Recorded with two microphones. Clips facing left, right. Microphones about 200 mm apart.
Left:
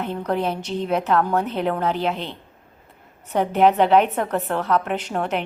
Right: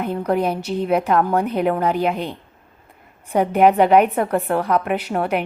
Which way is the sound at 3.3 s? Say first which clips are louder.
Right 3 dB; 10° right (ahead or behind).